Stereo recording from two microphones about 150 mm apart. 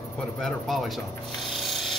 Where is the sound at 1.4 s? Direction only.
Centre (ahead or behind).